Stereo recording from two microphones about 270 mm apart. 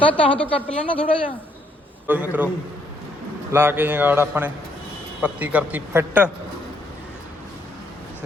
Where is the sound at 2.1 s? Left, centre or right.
Centre.